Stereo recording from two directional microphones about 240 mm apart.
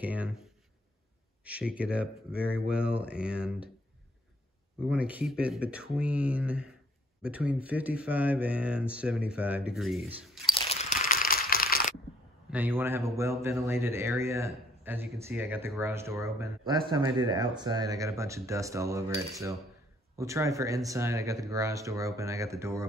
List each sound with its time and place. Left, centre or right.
0.0 s speech: centre
4.8 s speech: centre
10.4 s crumpling: left
12.4 s a man's voice: centre
20.2 s a man's voice: centre